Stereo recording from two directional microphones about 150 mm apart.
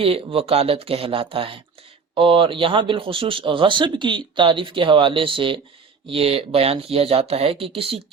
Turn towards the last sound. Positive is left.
turn(degrees=-40)  # may be behind; listen again after turning